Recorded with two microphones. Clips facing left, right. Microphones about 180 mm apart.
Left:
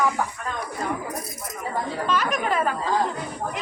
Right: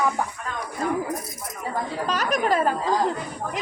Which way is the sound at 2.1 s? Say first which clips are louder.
Right 2 dB; 40° right (ahead or behind).